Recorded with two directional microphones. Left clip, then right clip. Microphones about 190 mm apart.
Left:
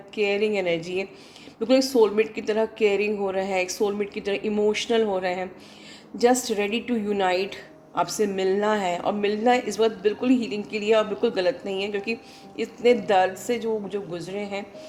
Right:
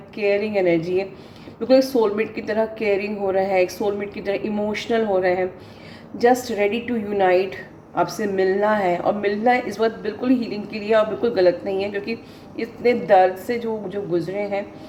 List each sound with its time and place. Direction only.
0.2 s a woman's voice: 35° left (ahead or behind)